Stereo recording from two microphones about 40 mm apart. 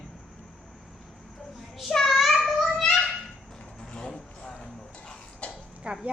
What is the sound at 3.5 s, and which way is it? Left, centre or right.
Vehicle, centre.